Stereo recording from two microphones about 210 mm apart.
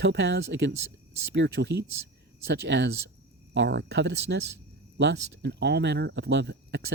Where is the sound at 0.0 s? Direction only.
60° right (ahead or behind).